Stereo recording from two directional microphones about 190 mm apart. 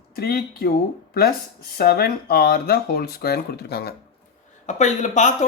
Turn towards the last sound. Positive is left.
turn(degrees=40)  # may be behind; listen again after turning